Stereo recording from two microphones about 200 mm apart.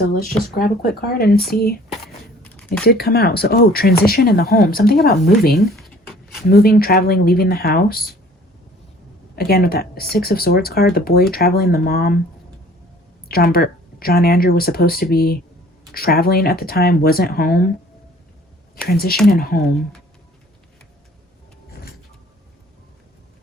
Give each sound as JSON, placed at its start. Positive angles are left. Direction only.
{"t": 0.6, "sound": "speech", "side_deg": 50}
{"t": 1.9, "sound": "a sound", "side_deg": 5}
{"t": 2.8, "sound": "speech", "side_deg": 50}
{"t": 5.5, "sound": "a sound", "side_deg": 0}
{"t": 6.5, "sound": "speech", "side_deg": 50}
{"t": 9.3, "sound": "speech", "side_deg": 50}
{"t": 13.2, "sound": "speech", "side_deg": 50}
{"t": 18.9, "sound": "speech", "side_deg": 50}